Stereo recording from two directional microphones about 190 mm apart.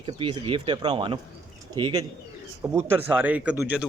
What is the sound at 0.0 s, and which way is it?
Speech, 25° right (ahead or behind).